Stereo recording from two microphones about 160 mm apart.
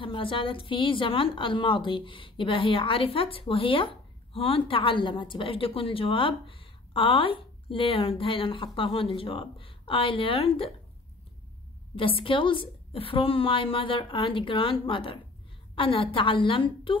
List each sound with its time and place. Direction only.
0.0 s a woman's voice: 35° left (ahead or behind)
11.9 s a woman's voice: 35° left (ahead or behind)